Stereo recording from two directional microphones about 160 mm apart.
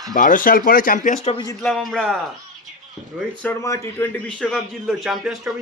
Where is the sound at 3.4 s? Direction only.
15° left (ahead or behind).